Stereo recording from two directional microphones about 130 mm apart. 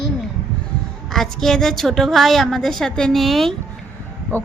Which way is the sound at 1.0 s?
5° left (ahead or behind).